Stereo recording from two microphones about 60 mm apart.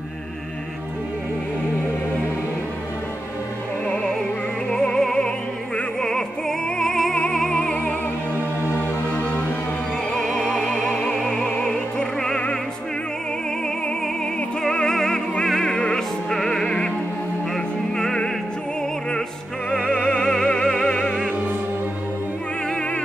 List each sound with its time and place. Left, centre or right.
3.8 s music: centre
10.2 s music: centre
14.6 s music: centre
17.9 s opera: centre
19.9 s opera: centre